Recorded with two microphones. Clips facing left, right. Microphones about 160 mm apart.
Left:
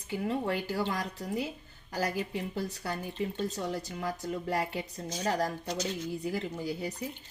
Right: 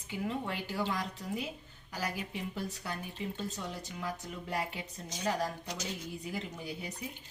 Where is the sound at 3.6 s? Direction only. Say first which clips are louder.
Left 6 dB; 35° left (ahead or behind).